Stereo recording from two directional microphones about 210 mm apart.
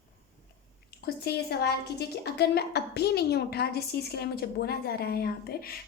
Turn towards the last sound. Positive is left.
turn(degrees=45)  # may be behind; listen again after turning